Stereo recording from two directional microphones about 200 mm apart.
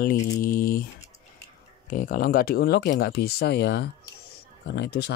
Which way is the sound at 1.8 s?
45° left (ahead or behind).